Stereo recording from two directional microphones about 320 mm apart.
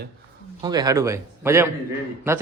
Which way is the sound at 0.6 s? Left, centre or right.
Centre.